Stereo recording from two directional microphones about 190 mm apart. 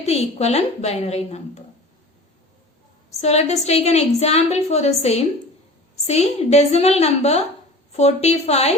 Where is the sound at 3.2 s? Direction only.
35° left (ahead or behind).